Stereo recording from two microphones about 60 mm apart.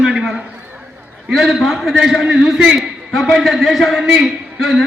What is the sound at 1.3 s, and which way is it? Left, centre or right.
A man's voice, centre.